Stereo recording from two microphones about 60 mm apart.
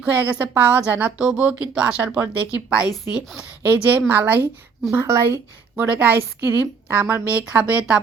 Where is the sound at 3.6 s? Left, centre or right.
Right.